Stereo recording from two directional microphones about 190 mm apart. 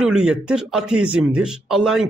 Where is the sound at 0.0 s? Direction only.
5° right (ahead or behind).